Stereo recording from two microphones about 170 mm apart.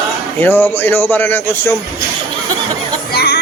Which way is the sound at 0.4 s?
10° left (ahead or behind).